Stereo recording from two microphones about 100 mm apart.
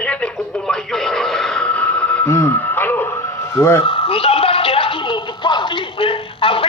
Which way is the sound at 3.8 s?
70° left (ahead or behind).